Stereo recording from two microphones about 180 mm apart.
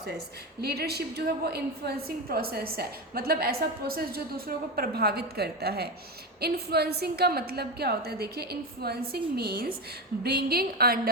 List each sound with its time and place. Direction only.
0.6 s a woman's voice: 60° right (ahead or behind)